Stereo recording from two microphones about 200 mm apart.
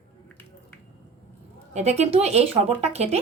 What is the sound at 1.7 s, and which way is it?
A woman's voice, 30° right (ahead or behind).